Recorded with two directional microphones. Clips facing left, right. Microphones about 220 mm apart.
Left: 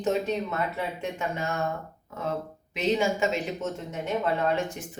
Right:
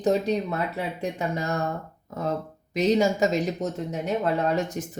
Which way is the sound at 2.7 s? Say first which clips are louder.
Right 4 dB; 40° right (ahead or behind).